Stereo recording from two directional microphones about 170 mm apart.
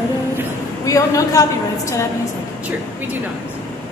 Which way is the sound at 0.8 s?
20° left (ahead or behind).